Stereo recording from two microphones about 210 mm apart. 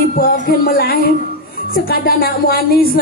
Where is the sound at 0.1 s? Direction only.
45° left (ahead or behind).